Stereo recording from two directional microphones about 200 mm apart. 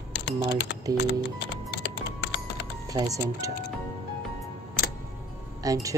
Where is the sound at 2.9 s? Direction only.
15° right (ahead or behind).